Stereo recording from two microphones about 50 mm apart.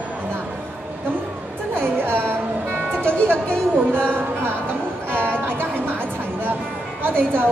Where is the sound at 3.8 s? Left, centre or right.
Right.